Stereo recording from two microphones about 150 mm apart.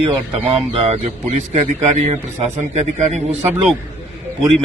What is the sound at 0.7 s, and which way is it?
A man's voice, 45° right (ahead or behind).